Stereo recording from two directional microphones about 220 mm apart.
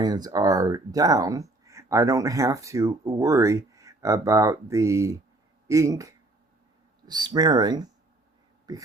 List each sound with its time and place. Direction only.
0.0 s speech: 20° right (ahead or behind)